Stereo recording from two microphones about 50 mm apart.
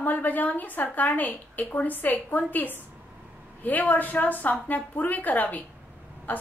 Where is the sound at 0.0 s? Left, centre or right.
Left.